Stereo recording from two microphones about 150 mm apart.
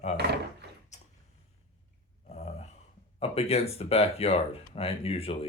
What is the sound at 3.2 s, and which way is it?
Speech, 40° left (ahead or behind).